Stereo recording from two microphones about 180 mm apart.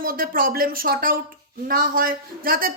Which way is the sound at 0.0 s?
50° right (ahead or behind).